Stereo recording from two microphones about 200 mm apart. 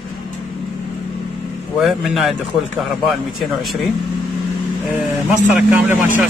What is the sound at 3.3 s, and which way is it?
Speech, centre (ahead or behind).